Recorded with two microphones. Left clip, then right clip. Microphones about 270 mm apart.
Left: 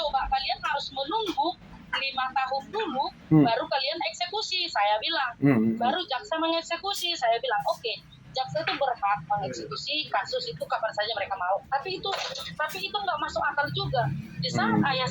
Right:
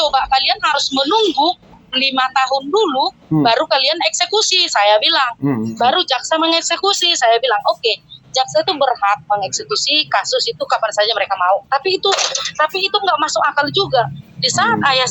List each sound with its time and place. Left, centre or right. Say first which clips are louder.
0.0 s a woman's voice: right 13 dB; right
5.4 s a woman's voice: right 4 dB; centre
5.8 s speech: right 13 dB; right